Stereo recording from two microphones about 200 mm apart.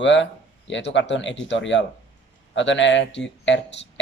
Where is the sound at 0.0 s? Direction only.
65° left (ahead or behind).